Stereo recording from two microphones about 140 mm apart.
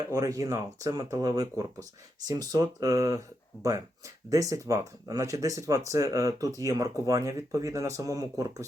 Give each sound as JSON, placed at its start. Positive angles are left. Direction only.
{"t": 0.1, "sound": "speech", "side_deg": -25}